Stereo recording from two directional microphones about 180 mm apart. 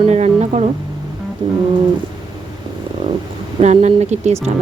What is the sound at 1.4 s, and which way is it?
Music, 25° right (ahead or behind).